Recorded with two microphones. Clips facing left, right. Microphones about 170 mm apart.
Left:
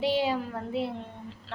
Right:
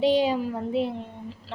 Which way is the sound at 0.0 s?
15° right (ahead or behind).